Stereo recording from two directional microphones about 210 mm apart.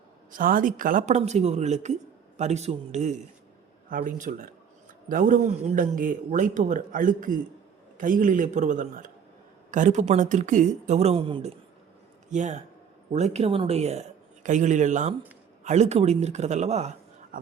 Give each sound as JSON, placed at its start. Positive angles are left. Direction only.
{"t": 0.3, "sound": "a man's voice", "side_deg": -40}
{"t": 12.3, "sound": "a man's voice", "side_deg": -35}
{"t": 17.3, "sound": "a sound", "side_deg": -40}